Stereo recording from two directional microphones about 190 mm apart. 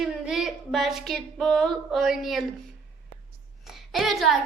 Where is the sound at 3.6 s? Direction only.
Centre (ahead or behind).